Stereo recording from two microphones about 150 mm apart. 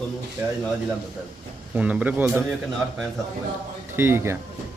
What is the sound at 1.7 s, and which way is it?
Speech, 10° right (ahead or behind).